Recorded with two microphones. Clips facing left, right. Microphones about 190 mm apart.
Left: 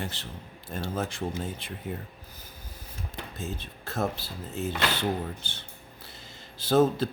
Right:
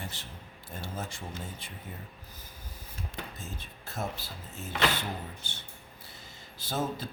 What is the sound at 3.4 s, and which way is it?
Speech, 70° left (ahead or behind).